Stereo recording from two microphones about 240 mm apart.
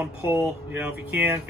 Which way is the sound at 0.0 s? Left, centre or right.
Centre.